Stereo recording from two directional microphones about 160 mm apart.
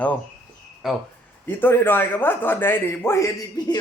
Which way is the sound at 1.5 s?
10° left (ahead or behind).